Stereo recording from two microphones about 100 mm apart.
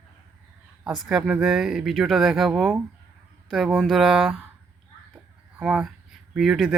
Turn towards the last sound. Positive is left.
turn(degrees=-5)  # may be behind; listen again after turning